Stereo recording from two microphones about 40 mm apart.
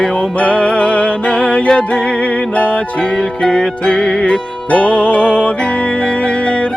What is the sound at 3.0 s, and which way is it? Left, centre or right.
Music, centre.